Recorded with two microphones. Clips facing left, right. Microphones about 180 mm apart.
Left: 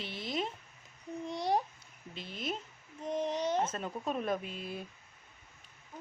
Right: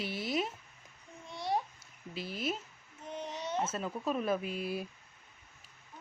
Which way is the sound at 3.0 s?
35° left (ahead or behind).